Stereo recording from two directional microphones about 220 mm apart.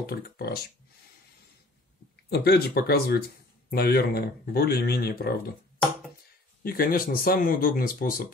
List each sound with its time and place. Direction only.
0.0 s speech: 45° left (ahead or behind)
2.2 s speech: 50° left (ahead or behind)
6.6 s speech: 40° left (ahead or behind)